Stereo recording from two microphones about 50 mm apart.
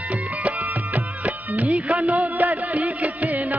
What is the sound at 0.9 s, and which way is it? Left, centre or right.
Music, right.